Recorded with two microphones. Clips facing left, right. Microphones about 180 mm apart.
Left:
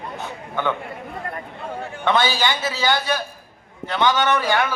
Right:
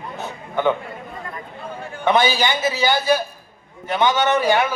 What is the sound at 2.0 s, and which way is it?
A man's voice, 20° right (ahead or behind).